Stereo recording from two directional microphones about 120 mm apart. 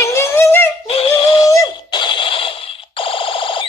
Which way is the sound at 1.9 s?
40° left (ahead or behind).